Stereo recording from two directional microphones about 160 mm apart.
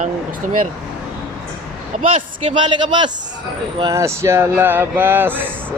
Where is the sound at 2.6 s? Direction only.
30° right (ahead or behind).